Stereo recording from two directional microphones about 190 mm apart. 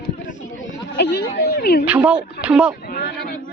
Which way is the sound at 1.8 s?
5° right (ahead or behind).